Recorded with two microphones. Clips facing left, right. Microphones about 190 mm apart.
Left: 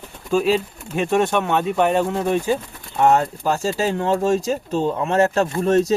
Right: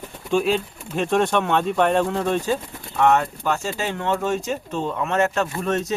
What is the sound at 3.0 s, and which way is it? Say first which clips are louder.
Speech: left 2 dB; 30° left (ahead or behind).